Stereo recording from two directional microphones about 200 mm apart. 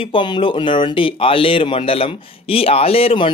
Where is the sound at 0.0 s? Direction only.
25° left (ahead or behind).